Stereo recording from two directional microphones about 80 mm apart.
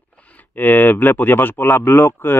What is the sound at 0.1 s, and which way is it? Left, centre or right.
Speech, centre.